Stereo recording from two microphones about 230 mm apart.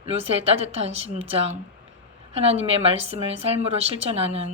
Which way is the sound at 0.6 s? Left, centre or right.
Right.